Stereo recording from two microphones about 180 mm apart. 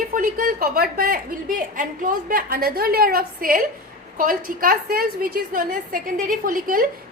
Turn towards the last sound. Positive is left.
turn(degrees=-50)  # may be behind; listen again after turning